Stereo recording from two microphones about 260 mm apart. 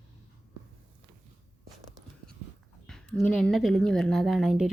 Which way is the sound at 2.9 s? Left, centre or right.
Centre.